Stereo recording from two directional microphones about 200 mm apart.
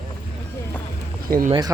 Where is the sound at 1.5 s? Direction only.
20° right (ahead or behind).